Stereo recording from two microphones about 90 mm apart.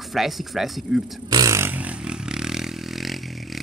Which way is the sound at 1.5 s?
30° right (ahead or behind).